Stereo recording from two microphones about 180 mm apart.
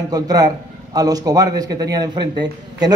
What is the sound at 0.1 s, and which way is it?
Speech, 20° right (ahead or behind).